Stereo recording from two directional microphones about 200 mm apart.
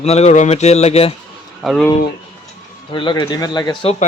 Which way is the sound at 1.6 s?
Centre (ahead or behind).